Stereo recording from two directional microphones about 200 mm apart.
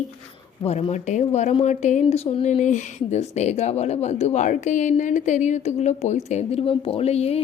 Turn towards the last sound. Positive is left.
turn(degrees=30)  # may be behind; listen again after turning